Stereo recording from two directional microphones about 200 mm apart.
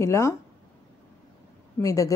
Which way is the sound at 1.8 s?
15° left (ahead or behind).